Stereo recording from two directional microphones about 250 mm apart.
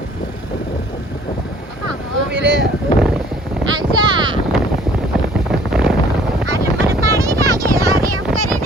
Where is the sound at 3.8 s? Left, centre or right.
Centre.